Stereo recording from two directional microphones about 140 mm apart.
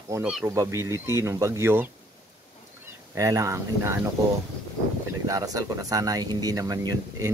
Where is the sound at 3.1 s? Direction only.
25° right (ahead or behind).